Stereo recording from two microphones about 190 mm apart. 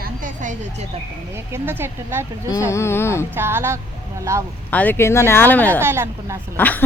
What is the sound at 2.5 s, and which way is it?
Speech, 15° left (ahead or behind).